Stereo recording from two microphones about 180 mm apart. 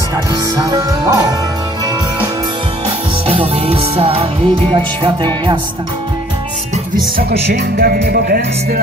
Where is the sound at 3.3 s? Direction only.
30° right (ahead or behind).